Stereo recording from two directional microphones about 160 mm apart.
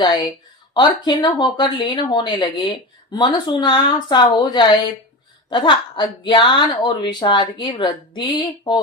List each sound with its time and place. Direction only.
0.0 s speech: 30° left (ahead or behind)